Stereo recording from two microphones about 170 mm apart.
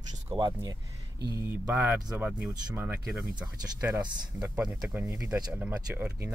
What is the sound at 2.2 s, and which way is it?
Speech, 10° right (ahead or behind).